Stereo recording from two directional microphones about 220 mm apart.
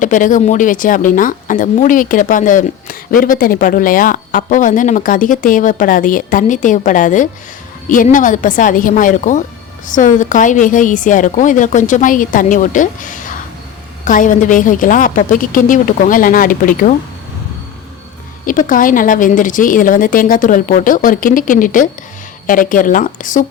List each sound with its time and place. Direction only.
0.0 s speech: 35° left (ahead or behind)
18.4 s speech: 40° left (ahead or behind)